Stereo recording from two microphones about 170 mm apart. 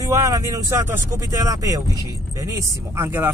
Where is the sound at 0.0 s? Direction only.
20° right (ahead or behind).